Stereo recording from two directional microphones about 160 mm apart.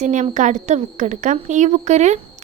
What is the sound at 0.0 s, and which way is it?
Speech, 50° right (ahead or behind).